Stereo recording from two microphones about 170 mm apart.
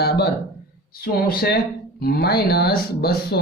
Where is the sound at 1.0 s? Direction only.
60° left (ahead or behind).